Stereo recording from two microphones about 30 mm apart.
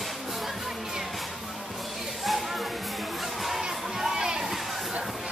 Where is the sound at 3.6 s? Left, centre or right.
Centre.